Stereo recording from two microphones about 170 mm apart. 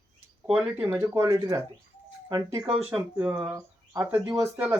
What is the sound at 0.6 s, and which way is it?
Speech, 15° right (ahead or behind).